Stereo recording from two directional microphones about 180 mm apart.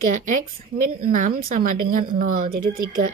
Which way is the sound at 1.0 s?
45° right (ahead or behind).